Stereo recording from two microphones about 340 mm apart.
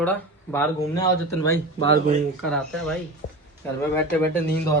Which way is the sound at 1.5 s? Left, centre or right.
Right.